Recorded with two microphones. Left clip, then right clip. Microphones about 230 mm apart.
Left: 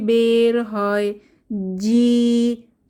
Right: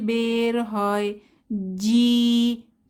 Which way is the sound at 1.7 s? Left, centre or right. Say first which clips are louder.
Left 3 dB; centre.